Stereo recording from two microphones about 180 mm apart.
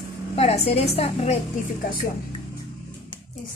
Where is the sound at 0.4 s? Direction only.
35° left (ahead or behind).